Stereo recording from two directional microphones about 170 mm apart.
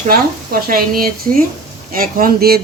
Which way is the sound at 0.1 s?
60° right (ahead or behind).